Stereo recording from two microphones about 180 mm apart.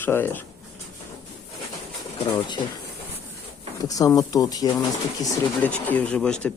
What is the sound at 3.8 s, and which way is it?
Speech, 20° left (ahead or behind).